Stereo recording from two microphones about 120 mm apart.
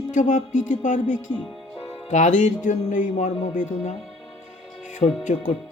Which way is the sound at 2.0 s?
90° left.